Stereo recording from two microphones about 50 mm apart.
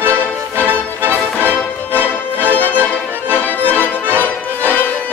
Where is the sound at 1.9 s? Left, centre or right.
Left.